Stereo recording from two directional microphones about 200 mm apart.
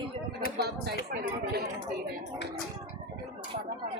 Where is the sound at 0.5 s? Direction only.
55° right (ahead or behind).